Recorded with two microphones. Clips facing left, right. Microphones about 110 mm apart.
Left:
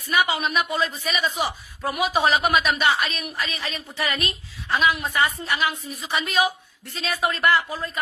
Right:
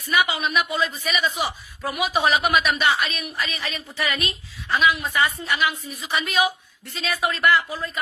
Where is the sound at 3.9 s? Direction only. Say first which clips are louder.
Even; 30° left (ahead or behind).